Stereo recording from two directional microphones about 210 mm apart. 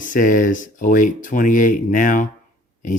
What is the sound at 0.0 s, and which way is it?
Speech, 40° left (ahead or behind).